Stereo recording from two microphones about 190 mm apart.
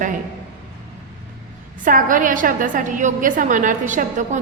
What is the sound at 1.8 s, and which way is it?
A woman's voice, 45° right (ahead or behind).